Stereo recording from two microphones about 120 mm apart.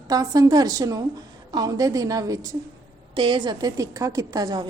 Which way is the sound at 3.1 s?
40° right (ahead or behind).